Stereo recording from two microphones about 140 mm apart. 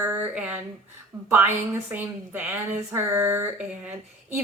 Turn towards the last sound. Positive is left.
turn(degrees=-15)  # may be behind; listen again after turning